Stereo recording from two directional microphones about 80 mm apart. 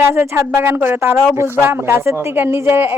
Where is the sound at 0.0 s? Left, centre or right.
Right.